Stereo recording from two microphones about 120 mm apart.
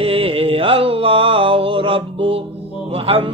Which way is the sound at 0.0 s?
50° right (ahead or behind).